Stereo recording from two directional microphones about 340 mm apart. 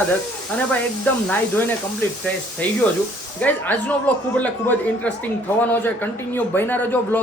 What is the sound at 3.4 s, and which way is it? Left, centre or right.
A man's voice, centre.